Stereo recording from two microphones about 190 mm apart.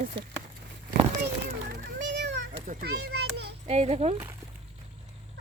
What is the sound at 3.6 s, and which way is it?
Speech, 35° right (ahead or behind).